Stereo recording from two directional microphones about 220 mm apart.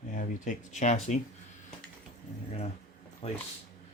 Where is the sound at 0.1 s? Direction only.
35° left (ahead or behind).